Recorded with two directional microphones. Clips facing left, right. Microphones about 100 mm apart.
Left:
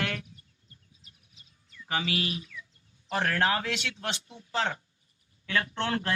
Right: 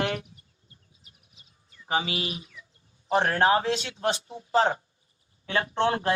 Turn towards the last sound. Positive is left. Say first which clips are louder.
# right 6 dB
turn(degrees=-25)  # may be behind; listen again after turning